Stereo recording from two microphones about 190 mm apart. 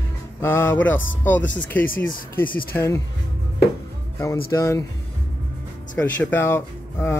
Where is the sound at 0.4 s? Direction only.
10° left (ahead or behind).